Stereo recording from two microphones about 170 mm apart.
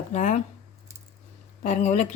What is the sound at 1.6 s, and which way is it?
Speech, 40° left (ahead or behind).